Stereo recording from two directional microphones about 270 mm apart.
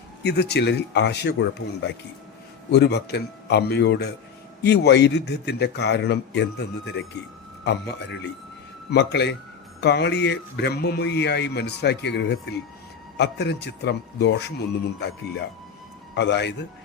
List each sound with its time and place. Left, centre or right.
0.2 s a man's voice: left